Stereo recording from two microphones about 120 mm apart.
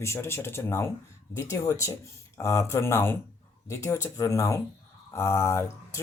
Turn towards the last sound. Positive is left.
turn(degrees=20)  # may be behind; listen again after turning